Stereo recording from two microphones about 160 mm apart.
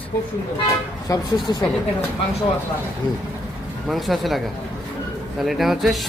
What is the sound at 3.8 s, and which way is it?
Speech, centre (ahead or behind).